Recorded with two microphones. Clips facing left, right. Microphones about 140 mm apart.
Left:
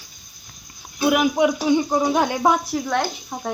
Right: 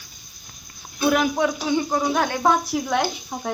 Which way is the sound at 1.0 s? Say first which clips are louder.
Left 2 dB; 10° left (ahead or behind).